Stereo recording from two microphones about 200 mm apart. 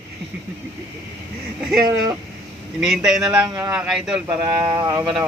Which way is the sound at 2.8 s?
Centre (ahead or behind).